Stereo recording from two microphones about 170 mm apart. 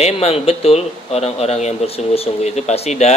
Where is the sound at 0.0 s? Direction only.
35° left (ahead or behind).